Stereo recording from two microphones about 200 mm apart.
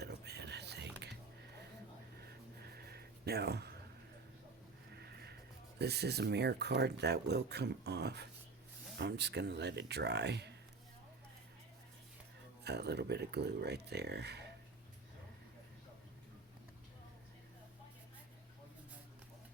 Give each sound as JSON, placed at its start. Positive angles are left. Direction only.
{"t": 0.0, "sound": "whispering", "side_deg": -55}
{"t": 2.6, "sound": "a sound", "side_deg": -50}
{"t": 4.9, "sound": "sniff", "side_deg": -55}
{"t": 5.8, "sound": "speech", "side_deg": -55}
{"t": 12.6, "sound": "speech", "side_deg": -55}